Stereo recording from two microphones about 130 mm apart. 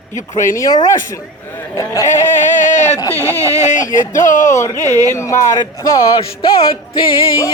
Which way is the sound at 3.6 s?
70° left (ahead or behind).